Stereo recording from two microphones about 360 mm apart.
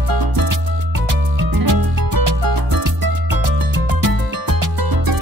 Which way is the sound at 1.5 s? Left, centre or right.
Right.